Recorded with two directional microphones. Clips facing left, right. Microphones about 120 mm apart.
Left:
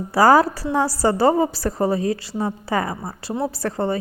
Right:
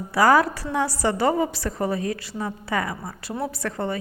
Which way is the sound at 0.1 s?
35° left (ahead or behind).